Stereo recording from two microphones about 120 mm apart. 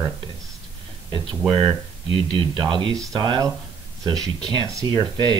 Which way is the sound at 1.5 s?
50° right (ahead or behind).